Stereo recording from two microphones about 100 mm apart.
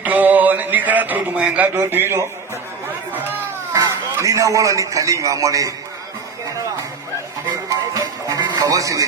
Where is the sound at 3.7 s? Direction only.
35° right (ahead or behind).